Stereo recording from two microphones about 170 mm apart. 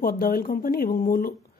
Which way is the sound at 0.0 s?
60° left (ahead or behind).